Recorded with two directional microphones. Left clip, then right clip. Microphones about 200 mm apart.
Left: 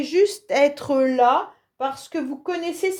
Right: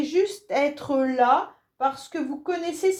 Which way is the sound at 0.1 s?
45° left (ahead or behind).